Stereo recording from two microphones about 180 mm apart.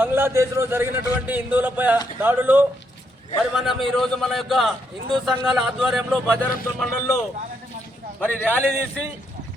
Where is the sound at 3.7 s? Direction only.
Centre (ahead or behind).